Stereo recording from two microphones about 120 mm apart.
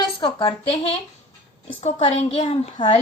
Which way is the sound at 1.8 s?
60° left (ahead or behind).